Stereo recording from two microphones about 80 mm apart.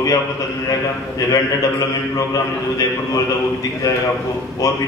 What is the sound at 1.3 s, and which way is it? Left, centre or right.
Speech, left.